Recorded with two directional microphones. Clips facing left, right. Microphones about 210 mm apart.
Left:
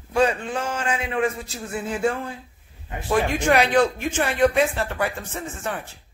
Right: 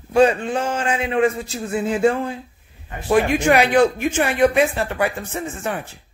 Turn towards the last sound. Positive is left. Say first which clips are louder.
# right 4 dB
turn(degrees=-10)  # may be behind; listen again after turning